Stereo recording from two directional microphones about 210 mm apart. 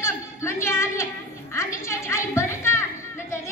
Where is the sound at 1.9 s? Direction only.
15° left (ahead or behind).